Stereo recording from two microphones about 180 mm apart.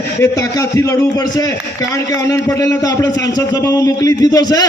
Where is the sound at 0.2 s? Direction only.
20° left (ahead or behind).